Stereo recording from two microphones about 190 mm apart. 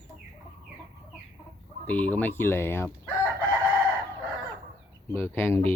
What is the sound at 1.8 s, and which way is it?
Speech, 10° left (ahead or behind).